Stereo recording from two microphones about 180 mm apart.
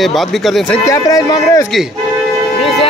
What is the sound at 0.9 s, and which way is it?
Speech, 20° left (ahead or behind).